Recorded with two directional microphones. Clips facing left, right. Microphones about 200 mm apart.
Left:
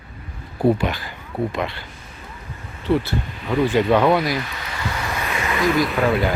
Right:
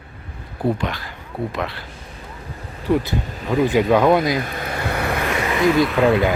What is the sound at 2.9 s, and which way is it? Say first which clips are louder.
Speech: right 1 dB; 15° right (ahead or behind).